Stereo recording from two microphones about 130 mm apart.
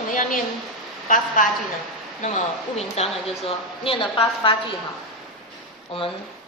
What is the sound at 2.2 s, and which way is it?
Speech, 65° left (ahead or behind).